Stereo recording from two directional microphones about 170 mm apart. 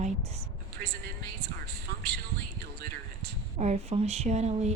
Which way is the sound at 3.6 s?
40° right (ahead or behind).